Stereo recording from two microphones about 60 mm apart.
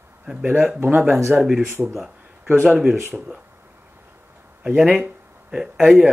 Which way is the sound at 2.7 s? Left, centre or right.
Centre.